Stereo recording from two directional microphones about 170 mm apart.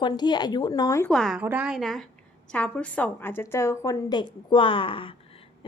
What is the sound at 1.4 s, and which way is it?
A woman's voice, 10° right (ahead or behind).